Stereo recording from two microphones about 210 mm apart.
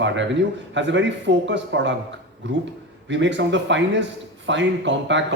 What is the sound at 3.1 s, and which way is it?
A man's voice, 60° right (ahead or behind).